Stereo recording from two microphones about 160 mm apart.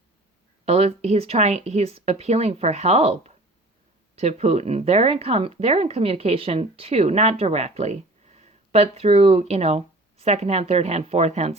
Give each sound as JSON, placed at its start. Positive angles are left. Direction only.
{"t": 0.6, "sound": "speech", "side_deg": -45}